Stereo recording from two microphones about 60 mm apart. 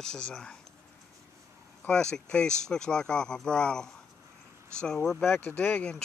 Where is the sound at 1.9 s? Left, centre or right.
Centre.